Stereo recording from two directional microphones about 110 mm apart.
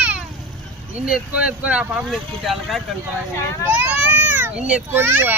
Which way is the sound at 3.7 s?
15° right (ahead or behind).